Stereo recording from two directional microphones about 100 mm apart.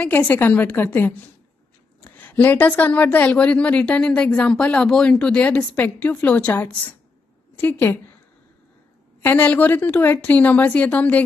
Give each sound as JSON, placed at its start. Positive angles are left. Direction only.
{"t": 0.0, "sound": "speech", "side_deg": 15}
{"t": 9.2, "sound": "speech", "side_deg": 20}